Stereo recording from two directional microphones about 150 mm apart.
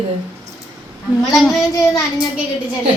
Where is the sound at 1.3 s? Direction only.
Centre (ahead or behind).